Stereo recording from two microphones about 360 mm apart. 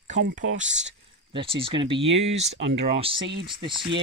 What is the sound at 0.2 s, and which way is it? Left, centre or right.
Speech, right.